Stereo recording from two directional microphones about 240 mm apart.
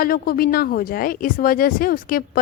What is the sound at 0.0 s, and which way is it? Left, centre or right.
A woman's voice, left.